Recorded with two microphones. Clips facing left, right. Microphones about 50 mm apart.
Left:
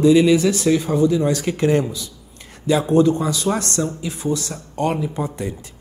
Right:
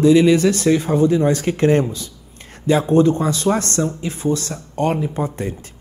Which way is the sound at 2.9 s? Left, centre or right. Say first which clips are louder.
Even; right.